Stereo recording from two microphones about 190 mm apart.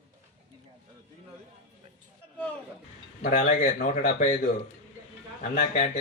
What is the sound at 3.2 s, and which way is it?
Speech, 50° left (ahead or behind).